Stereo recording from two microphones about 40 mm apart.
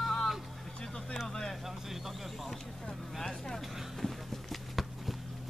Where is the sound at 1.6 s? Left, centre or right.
Centre.